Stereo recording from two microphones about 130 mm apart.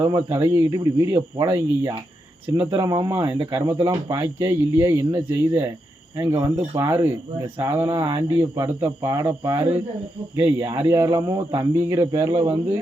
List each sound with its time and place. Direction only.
0.1 s speech: 30° right (ahead or behind)
12.3 s speech: 45° right (ahead or behind)